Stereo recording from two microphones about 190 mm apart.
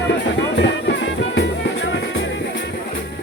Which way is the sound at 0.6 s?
70° left (ahead or behind).